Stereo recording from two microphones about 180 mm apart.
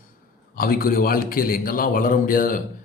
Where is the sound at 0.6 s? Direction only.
55° left (ahead or behind).